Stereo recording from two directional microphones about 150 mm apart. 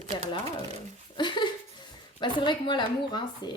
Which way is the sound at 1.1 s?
30° left (ahead or behind).